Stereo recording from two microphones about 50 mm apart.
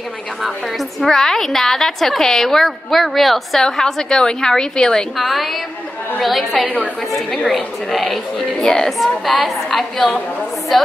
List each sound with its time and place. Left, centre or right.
0.4 s a woman's voice: centre
5.1 s a woman's voice: centre
6.6 s a woman's voice: left
7.9 s a woman's voice: centre